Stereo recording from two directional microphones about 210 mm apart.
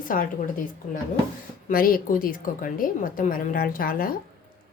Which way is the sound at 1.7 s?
40° left (ahead or behind).